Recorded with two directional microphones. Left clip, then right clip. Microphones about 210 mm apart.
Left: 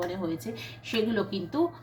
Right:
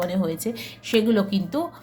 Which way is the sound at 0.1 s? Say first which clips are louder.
Right 7 dB; 60° right (ahead or behind).